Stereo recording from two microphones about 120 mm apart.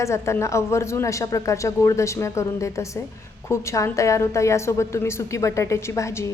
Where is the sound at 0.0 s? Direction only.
25° left (ahead or behind).